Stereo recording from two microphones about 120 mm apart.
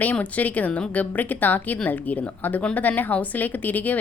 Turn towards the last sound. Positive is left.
turn(degrees=15)  # may be behind; listen again after turning